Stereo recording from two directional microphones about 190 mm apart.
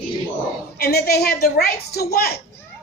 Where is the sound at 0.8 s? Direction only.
55° left (ahead or behind).